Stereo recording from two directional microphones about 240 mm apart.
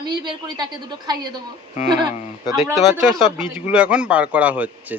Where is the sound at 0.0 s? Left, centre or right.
Centre.